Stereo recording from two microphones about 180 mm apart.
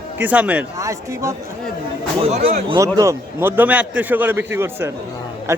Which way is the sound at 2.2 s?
30° right (ahead or behind).